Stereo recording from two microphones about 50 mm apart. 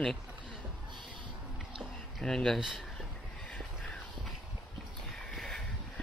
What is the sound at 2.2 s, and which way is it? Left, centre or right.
Speech, centre.